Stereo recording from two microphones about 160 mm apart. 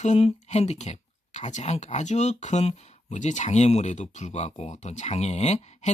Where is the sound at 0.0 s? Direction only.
45° left (ahead or behind).